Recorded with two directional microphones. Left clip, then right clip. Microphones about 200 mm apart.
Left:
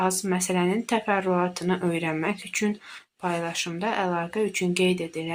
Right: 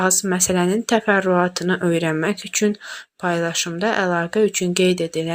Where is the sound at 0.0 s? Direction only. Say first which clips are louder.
Right 6 dB; 25° right (ahead or behind).